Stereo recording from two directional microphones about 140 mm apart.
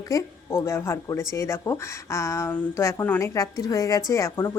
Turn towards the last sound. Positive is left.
turn(degrees=25)  # may be behind; listen again after turning